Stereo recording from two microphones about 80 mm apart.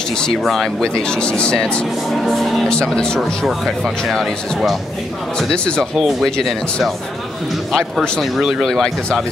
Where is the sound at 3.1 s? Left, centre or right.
Centre.